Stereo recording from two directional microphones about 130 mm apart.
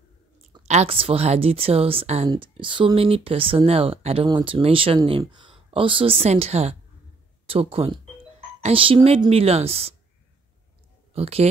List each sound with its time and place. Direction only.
0.7 s speech: 50° right (ahead or behind)
11.1 s speech: 50° right (ahead or behind)